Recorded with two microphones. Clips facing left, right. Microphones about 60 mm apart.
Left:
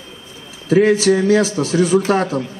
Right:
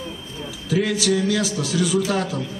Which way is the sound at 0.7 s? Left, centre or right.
Left.